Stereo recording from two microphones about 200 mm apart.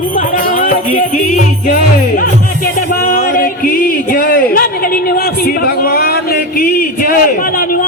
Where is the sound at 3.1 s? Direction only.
45° left (ahead or behind).